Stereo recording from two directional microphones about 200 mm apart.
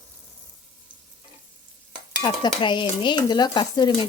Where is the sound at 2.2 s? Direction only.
20° left (ahead or behind).